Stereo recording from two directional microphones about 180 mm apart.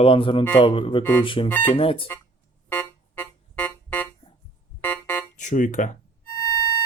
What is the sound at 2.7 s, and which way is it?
Keyboard, 10° left (ahead or behind).